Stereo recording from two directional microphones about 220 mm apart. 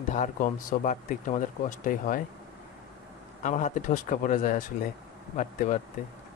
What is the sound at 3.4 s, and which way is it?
Speech, 35° left (ahead or behind).